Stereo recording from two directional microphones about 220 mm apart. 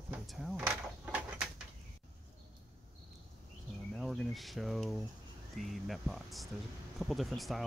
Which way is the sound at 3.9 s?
Centre (ahead or behind).